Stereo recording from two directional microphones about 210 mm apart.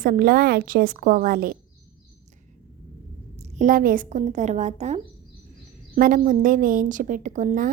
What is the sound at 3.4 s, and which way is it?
A woman's voice, 35° right (ahead or behind).